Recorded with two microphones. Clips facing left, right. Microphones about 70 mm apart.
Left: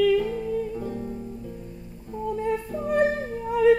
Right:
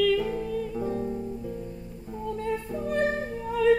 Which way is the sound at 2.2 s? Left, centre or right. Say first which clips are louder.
Left 3 dB; centre.